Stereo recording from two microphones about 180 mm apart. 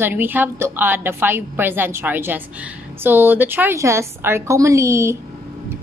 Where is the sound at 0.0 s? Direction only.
10° right (ahead or behind).